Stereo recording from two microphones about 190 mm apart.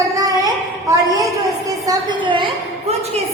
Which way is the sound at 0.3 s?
20° right (ahead or behind).